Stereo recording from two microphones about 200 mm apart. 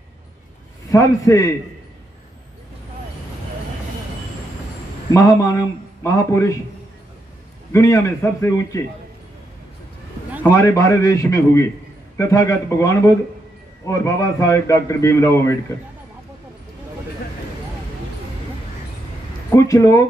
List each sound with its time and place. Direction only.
0.8 s a man's voice: 15° left (ahead or behind)
5.1 s a man's voice: 15° left (ahead or behind)
7.7 s a man's voice: 15° left (ahead or behind)
10.4 s a man's voice: 10° left (ahead or behind)
19.5 s a man's voice: 15° left (ahead or behind)